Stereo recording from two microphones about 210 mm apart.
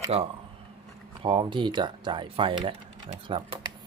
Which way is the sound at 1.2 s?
25° right (ahead or behind).